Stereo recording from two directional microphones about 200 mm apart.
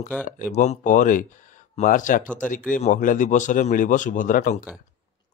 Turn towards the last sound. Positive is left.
turn(degrees=40)  # may be behind; listen again after turning